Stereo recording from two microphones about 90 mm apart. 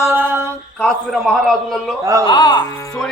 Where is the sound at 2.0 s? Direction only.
35° right (ahead or behind).